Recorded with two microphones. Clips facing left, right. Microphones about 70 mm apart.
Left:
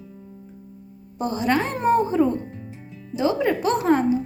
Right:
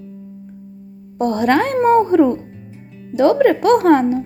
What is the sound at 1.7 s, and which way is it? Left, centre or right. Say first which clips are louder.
Speech: right 7 dB; right.